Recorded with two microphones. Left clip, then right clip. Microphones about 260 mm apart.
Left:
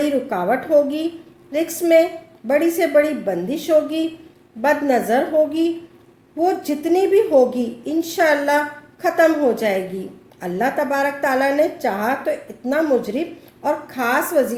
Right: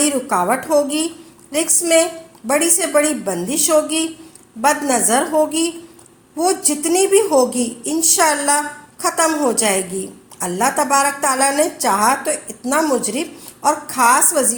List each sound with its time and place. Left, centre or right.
0.0 s a woman's voice: right